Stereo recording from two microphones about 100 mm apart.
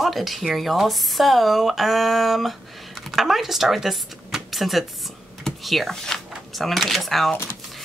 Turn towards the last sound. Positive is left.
turn(degrees=0)  # may be behind; listen again after turning